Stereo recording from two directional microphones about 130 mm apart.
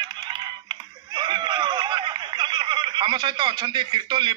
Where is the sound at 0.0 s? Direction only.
35° right (ahead or behind).